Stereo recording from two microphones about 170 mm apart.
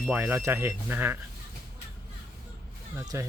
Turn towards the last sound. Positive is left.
turn(degrees=-15)  # may be behind; listen again after turning